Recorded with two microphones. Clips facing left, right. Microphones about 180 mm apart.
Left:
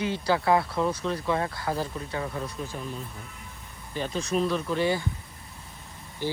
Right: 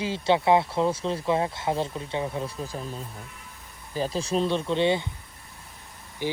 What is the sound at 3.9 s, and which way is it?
Speech, 35° right (ahead or behind).